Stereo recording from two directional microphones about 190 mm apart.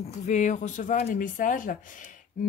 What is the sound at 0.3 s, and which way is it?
Speech, 40° left (ahead or behind).